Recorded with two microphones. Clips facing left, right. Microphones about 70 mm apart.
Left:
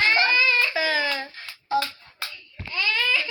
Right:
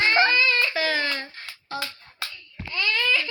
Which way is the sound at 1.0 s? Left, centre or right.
Centre.